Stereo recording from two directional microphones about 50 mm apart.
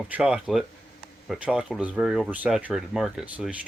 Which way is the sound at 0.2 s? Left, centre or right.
Centre.